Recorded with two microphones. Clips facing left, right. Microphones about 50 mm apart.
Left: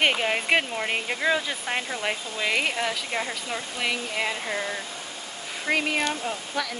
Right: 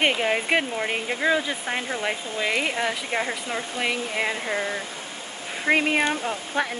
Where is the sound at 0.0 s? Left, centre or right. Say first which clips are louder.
Right 1 dB; centre.